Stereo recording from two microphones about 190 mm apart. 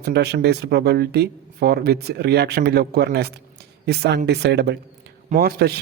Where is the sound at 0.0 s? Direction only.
60° right (ahead or behind).